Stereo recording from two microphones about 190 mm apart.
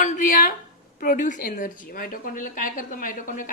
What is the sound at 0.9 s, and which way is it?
A woman's voice, 45° left (ahead or behind).